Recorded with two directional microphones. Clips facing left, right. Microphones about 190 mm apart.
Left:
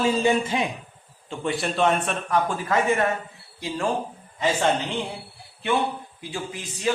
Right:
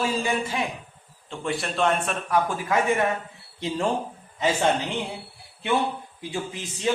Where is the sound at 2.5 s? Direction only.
10° right (ahead or behind).